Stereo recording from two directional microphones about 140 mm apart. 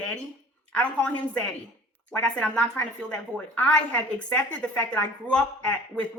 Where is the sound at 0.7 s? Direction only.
10° left (ahead or behind).